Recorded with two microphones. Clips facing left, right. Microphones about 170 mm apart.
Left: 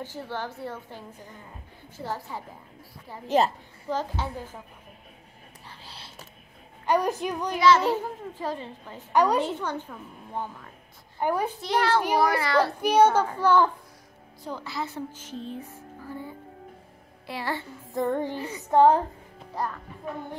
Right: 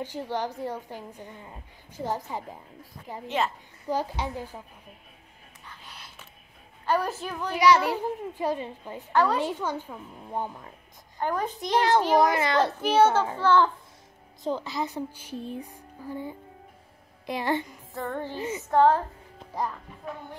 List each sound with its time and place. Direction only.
0.0 s a woman's voice: 15° right (ahead or behind)
3.3 s a child's voice: 40° left (ahead or behind)
3.9 s a woman's voice: 10° right (ahead or behind)
5.7 s whispering: 30° left (ahead or behind)
6.9 s a child's voice: 15° left (ahead or behind)
7.5 s a woman's voice: 15° right (ahead or behind)
9.1 s a child's voice: 15° left (ahead or behind)
9.4 s a woman's voice: 10° right (ahead or behind)
11.1 s a child's voice: 10° left (ahead or behind)
11.6 s a woman's voice: 15° right (ahead or behind)
12.8 s a child's voice: 15° left (ahead or behind)
14.4 s a woman's voice: 20° right (ahead or behind)
17.9 s a child's voice: 15° left (ahead or behind)